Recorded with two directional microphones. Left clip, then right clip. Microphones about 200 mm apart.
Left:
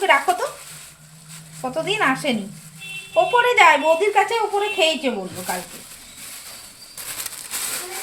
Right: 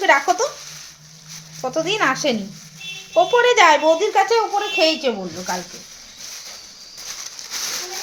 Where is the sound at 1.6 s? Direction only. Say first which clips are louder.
Right 2 dB; 35° right (ahead or behind).